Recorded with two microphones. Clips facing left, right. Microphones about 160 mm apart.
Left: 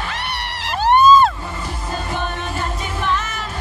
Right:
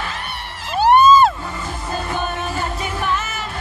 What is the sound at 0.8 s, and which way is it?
Music, 5° right (ahead or behind).